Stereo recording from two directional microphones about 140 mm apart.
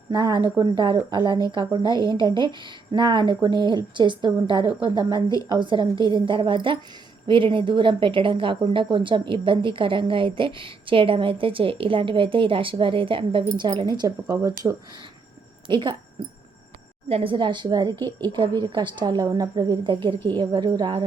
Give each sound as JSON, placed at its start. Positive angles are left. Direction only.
{"t": 0.1, "sound": "a woman's voice", "side_deg": -30}
{"t": 17.1, "sound": "a woman's voice", "side_deg": -40}